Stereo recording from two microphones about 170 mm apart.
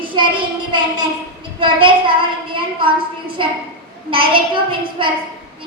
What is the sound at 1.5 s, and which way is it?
A woman's voice, 30° right (ahead or behind).